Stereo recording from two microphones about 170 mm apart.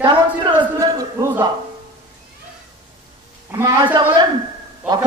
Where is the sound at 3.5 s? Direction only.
20° right (ahead or behind).